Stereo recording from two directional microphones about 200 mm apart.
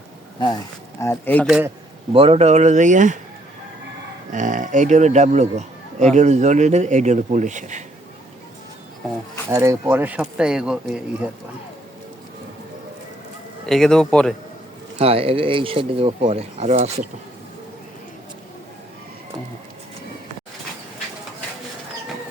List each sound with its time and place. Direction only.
0.3 s speech: 20° left (ahead or behind)
1.5 s speech: 5° right (ahead or behind)
2.1 s a man's voice: 30° right (ahead or behind)
4.3 s a man's voice: 40° right (ahead or behind)
9.5 s speech: 15° right (ahead or behind)
13.7 s speech: centre (ahead or behind)
14.9 s speech: 30° right (ahead or behind)